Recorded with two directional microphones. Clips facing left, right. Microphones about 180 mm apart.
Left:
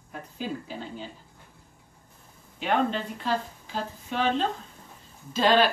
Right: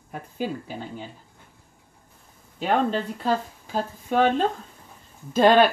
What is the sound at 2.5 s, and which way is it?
Speech, 40° right (ahead or behind).